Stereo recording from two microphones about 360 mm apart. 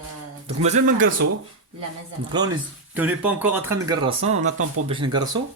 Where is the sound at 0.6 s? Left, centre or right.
Centre.